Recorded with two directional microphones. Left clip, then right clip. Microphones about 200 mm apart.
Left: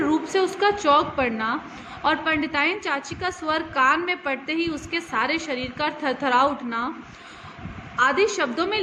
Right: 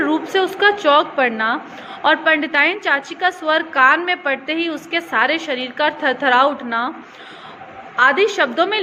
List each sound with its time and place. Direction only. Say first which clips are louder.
0.0 s a woman's voice: right 4 dB; 20° left (ahead or behind)
7.9 s a woman's voice: right 6 dB; 15° left (ahead or behind)